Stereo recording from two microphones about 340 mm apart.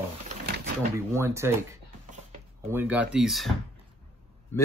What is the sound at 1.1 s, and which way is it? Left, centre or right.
Speech, centre.